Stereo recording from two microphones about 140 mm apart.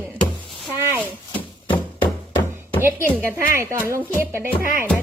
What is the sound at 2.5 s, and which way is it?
A woman's voice, 15° right (ahead or behind).